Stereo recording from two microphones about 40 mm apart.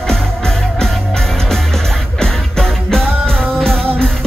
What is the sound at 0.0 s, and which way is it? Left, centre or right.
Music, centre.